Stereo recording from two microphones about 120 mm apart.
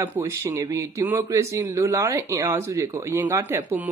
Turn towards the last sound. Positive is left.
turn(degrees=-15)  # may be behind; listen again after turning